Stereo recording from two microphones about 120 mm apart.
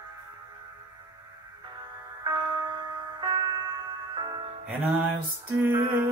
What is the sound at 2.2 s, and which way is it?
Music, 35° right (ahead or behind).